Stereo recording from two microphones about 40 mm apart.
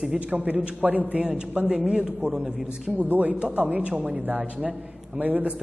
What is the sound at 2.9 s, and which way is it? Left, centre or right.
A woman's voice, right.